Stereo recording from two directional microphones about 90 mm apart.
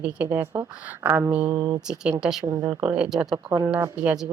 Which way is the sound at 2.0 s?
10° right (ahead or behind).